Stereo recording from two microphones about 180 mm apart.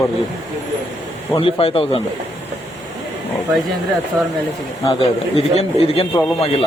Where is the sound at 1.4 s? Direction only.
30° left (ahead or behind).